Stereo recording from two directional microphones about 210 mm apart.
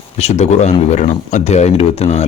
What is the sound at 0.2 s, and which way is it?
Speech, 30° left (ahead or behind).